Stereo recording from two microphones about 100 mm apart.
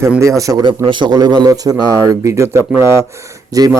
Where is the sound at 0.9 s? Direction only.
50° right (ahead or behind); by 2.6 s 30° right (ahead or behind).